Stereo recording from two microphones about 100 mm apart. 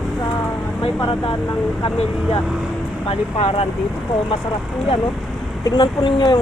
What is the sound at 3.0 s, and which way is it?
Speech, 75° left (ahead or behind).